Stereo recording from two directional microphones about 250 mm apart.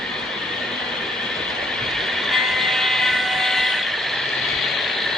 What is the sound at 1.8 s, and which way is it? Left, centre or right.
Vehicle, centre.